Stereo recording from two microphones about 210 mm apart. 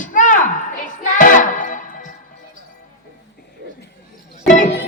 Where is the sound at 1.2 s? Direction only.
40° left (ahead or behind).